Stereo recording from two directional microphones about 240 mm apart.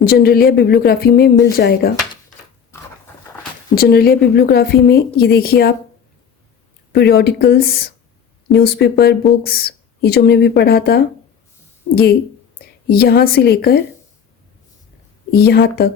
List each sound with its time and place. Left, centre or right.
0.0 s speech: left
3.8 s speech: left
6.9 s speech: left
15.3 s speech: left